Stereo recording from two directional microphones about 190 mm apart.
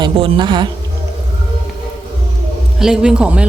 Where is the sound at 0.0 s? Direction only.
25° right (ahead or behind).